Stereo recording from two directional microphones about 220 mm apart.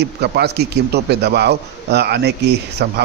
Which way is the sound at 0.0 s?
50° right (ahead or behind).